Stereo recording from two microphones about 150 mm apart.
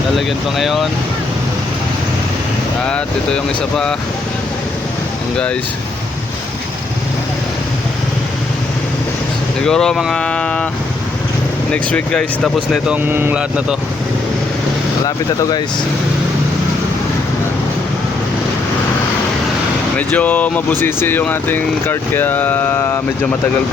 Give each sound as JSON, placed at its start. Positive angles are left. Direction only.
{"t": 0.6, "sound": "speech", "side_deg": 0}
{"t": 2.8, "sound": "speech", "side_deg": 5}
{"t": 9.6, "sound": "speech", "side_deg": 5}
{"t": 11.7, "sound": "speech", "side_deg": 10}
{"t": 15.0, "sound": "speech", "side_deg": 25}
{"t": 20.0, "sound": "speech", "side_deg": 10}